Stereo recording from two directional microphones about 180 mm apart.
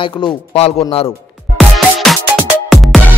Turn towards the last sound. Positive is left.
turn(degrees=0)  # may be behind; listen again after turning